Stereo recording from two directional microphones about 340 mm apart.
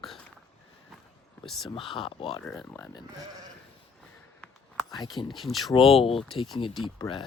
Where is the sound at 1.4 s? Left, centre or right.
Centre.